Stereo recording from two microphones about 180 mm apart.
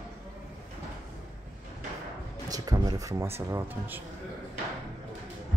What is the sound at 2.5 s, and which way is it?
Speech, 20° right (ahead or behind).